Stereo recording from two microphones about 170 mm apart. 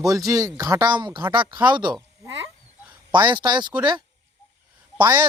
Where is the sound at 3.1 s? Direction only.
25° right (ahead or behind).